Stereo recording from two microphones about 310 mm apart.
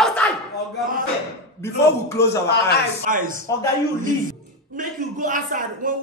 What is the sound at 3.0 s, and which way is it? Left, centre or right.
A man's voice, right.